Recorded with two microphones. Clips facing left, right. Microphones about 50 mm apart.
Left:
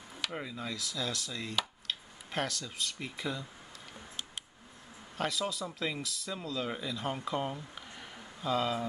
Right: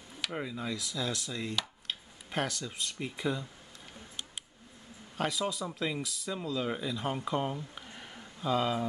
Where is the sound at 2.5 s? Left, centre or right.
Centre.